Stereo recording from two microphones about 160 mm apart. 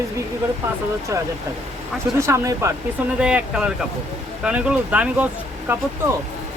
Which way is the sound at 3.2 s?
5° right (ahead or behind).